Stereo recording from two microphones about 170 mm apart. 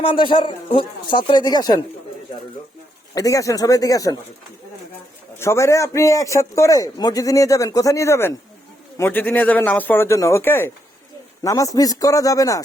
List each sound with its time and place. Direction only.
0.0 s a man's voice: 30° left (ahead or behind)
3.2 s a man's voice: 20° left (ahead or behind)
5.4 s a man's voice: 15° left (ahead or behind)